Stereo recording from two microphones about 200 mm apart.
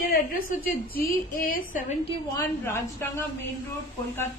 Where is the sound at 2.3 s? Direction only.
10° left (ahead or behind).